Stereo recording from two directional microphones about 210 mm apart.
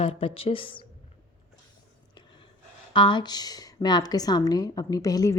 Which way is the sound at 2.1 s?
20° left (ahead or behind).